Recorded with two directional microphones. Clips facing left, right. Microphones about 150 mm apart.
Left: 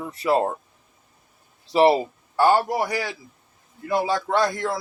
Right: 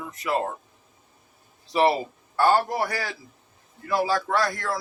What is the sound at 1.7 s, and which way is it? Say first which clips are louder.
Speech: left 4 dB; 25° left (ahead or behind).